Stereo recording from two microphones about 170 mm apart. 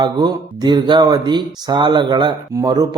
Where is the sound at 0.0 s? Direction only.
25° right (ahead or behind).